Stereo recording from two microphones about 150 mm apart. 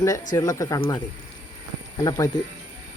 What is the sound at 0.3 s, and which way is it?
Speech, 20° left (ahead or behind).